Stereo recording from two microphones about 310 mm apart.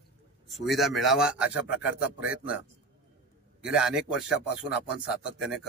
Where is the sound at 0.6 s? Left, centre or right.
Centre.